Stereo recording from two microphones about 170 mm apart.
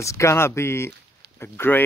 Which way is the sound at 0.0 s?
15° left (ahead or behind).